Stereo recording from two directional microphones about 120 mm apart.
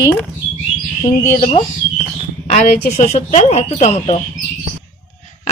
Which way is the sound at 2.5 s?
70° left (ahead or behind).